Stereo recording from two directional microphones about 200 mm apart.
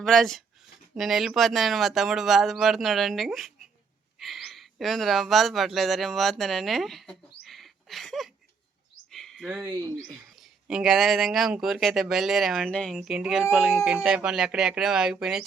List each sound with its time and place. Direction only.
0.0 s speech: centre (ahead or behind)
9.0 s a sound: centre (ahead or behind)
9.6 s speech: 20° right (ahead or behind)
9.9 s speech: centre (ahead or behind)